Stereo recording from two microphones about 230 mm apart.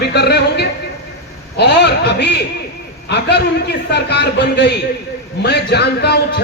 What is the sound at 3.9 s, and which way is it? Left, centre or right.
A man's voice, left.